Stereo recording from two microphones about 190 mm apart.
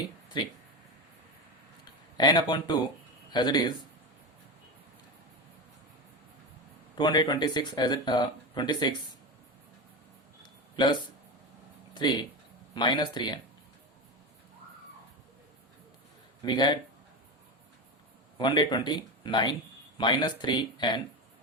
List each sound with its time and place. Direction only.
0.4 s speech: 25° left (ahead or behind)
1.8 s a sound: 20° left (ahead or behind)
3.3 s speech: 20° left (ahead or behind)
6.9 s speech: 25° left (ahead or behind)
11.9 s speech: 25° left (ahead or behind)
16.4 s speech: 20° left (ahead or behind)
18.3 s speech: 25° left (ahead or behind)